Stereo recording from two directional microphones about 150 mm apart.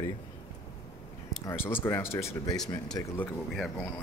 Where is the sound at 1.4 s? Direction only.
15° left (ahead or behind).